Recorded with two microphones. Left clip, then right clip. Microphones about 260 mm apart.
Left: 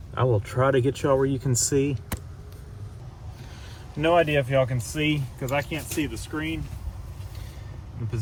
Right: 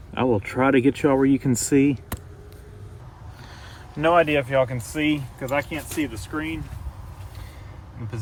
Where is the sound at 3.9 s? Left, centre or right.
Right.